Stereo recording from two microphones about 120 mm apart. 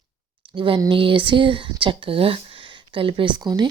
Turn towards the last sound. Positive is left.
turn(degrees=-35)  # may be behind; listen again after turning